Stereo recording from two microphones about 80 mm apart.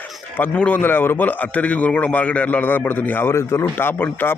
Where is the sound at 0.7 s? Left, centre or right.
Left.